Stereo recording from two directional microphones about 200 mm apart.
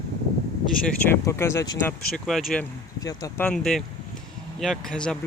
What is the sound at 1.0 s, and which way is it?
Speech, 15° left (ahead or behind).